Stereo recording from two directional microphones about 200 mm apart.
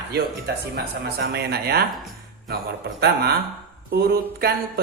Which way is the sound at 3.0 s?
50° right (ahead or behind).